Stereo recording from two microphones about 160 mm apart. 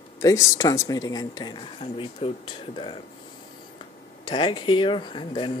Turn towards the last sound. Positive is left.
turn(degrees=30)  # may be behind; listen again after turning